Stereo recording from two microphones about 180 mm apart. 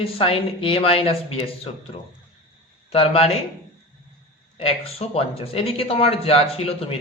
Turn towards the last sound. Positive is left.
turn(degrees=35)  # may be behind; listen again after turning